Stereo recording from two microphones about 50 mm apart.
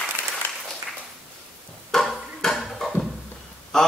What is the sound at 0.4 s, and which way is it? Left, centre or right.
Applause, left.